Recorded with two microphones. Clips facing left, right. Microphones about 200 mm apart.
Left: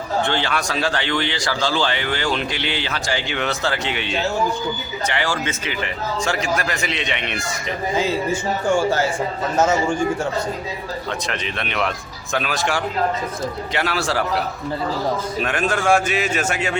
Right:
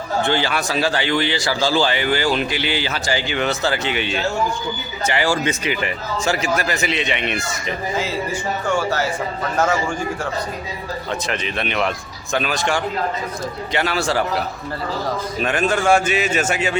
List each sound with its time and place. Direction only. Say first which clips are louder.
0.2 s a man's voice: right 2 dB; 5° right (ahead or behind)
9.6 s a man's voice: left 2 dB; 20° left (ahead or behind)
11.3 s a man's voice: right 3 dB; centre (ahead or behind)